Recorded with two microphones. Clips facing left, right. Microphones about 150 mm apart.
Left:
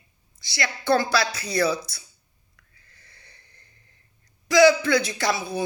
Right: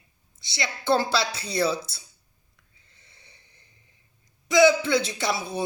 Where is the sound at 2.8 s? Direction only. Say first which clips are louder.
Left 2 dB; 25° right (ahead or behind).